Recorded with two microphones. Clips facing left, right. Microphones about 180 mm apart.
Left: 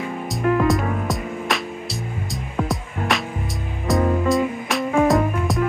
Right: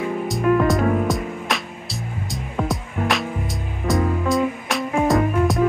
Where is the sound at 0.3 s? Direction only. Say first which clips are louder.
Even; centre (ahead or behind).